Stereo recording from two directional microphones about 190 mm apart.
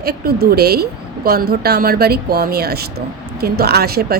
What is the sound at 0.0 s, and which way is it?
A woman's voice, 55° right (ahead or behind).